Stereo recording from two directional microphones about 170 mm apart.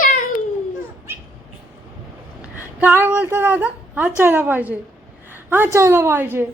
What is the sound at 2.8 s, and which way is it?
A woman's voice, 10° right (ahead or behind).